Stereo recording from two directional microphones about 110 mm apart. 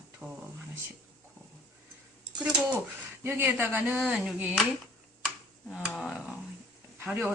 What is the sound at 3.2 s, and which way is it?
A man's voice, 20° right (ahead or behind).